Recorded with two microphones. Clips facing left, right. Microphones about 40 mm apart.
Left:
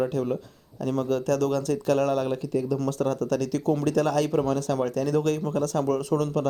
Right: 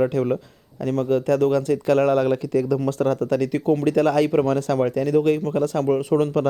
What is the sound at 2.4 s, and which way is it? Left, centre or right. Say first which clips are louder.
Speech: right 5 dB; right.